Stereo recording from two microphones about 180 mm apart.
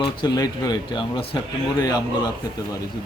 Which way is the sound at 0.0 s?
25° left (ahead or behind).